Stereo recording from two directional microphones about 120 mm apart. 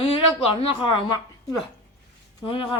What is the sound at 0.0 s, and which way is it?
A woman's voice, 50° left (ahead or behind).